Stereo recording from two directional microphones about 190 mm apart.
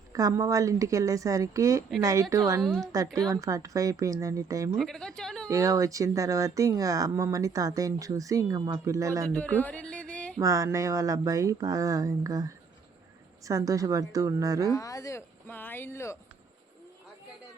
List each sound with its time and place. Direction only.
0.1 s speech: 15° right (ahead or behind)
2.6 s a woman's voice: centre (ahead or behind)
2.8 s speech: 20° right (ahead or behind)
4.8 s a woman's voice: centre (ahead or behind)
5.5 s speech: 15° right (ahead or behind)
9.3 s speech: 10° left (ahead or behind)
10.3 s speech: 15° right (ahead or behind)
14.7 s speech: 20° left (ahead or behind)